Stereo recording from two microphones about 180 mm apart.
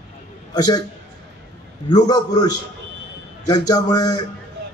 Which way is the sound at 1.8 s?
20° left (ahead or behind).